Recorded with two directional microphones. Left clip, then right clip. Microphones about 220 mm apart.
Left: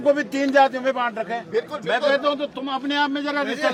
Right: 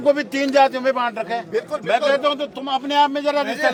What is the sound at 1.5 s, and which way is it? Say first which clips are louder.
Speech: right 3 dB; 30° right (ahead or behind).